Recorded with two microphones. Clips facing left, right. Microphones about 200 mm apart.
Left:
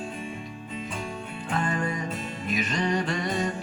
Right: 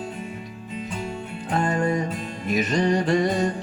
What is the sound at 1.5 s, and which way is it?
Music, 40° right (ahead or behind).